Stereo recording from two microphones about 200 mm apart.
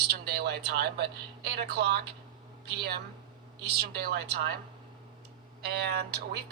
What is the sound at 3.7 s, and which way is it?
Speech, 50° right (ahead or behind).